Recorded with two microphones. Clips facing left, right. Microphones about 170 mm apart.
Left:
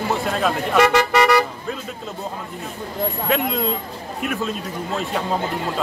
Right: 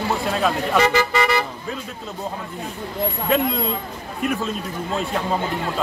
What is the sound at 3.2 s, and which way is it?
A man's voice, centre (ahead or behind).